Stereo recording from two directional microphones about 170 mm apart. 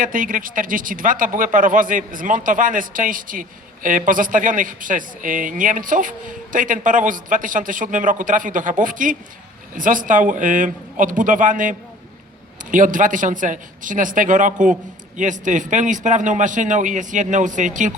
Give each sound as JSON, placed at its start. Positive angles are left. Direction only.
{"t": 0.0, "sound": "speech", "side_deg": -50}